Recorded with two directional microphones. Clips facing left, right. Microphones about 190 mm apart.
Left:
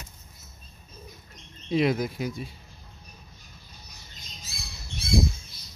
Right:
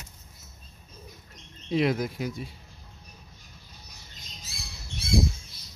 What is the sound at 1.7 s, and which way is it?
Speech, 15° left (ahead or behind).